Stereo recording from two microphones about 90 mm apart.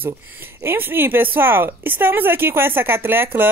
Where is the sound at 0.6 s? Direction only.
25° right (ahead or behind).